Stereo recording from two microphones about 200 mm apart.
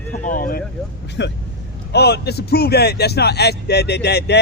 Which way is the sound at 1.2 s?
60° left (ahead or behind).